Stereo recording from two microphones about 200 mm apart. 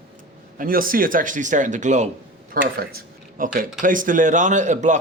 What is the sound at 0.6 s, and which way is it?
Speech, 45° right (ahead or behind).